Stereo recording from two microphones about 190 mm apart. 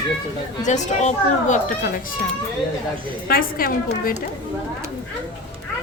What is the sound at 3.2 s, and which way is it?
Speech, 50° left (ahead or behind).